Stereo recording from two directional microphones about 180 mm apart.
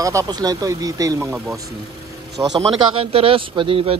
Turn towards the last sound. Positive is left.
turn(degrees=-30)  # may be behind; listen again after turning